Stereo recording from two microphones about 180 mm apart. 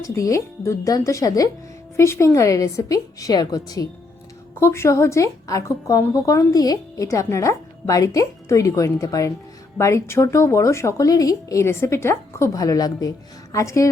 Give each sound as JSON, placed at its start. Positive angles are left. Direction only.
{"t": 0.0, "sound": "a woman's voice", "side_deg": 20}